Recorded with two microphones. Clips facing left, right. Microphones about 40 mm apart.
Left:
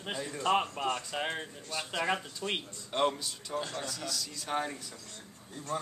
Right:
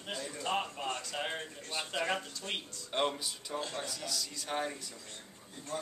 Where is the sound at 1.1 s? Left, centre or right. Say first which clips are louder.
Left 3 dB; centre.